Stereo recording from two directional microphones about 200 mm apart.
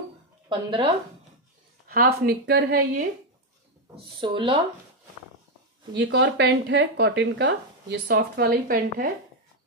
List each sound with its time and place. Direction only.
0.5 s speech: 25° right (ahead or behind)
1.9 s speech: 50° right (ahead or behind)
3.9 s speech: 25° right (ahead or behind)
5.9 s speech: 60° right (ahead or behind); by 9.1 s 45° right (ahead or behind)